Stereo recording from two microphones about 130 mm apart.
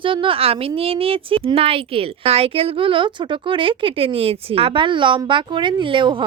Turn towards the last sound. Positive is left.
turn(degrees=-40)  # may be behind; listen again after turning